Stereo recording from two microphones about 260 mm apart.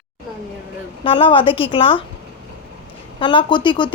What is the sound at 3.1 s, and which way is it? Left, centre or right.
Speech, centre.